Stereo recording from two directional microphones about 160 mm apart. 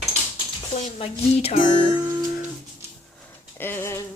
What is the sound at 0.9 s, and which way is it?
Speech, 40° left (ahead or behind).